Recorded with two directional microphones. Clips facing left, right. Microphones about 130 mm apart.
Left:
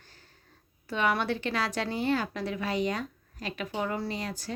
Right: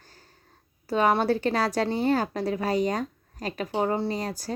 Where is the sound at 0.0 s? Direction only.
40° right (ahead or behind).